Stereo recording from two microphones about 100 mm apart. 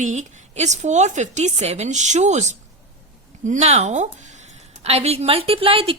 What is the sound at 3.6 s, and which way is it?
A woman's voice, 90° right.